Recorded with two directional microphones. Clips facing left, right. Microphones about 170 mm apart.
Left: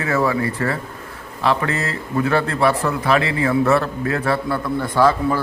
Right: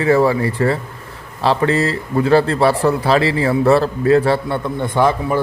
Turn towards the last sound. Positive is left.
turn(degrees=-20)  # may be behind; listen again after turning